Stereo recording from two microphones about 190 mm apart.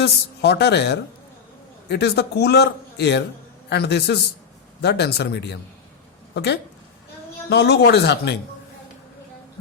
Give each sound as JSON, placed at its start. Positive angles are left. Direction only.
{"t": 0.0, "sound": "a man's voice", "side_deg": 60}